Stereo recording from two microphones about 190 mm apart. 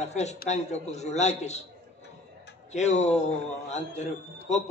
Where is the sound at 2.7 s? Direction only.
35° left (ahead or behind).